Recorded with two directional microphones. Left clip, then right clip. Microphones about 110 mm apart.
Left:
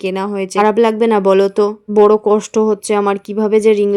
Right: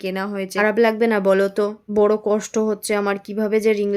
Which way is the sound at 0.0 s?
50° left (ahead or behind).